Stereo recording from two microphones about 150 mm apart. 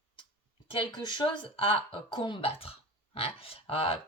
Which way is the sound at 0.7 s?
30° left (ahead or behind).